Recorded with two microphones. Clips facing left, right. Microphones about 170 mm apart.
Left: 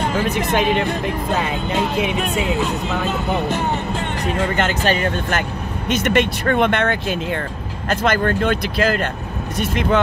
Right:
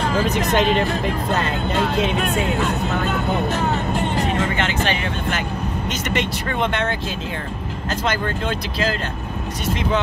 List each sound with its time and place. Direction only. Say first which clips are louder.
0.6 s speech: even; 10° left (ahead or behind)
4.4 s speech: left 2 dB; 45° left (ahead or behind)
5.9 s speech: left 8 dB; 55° left (ahead or behind)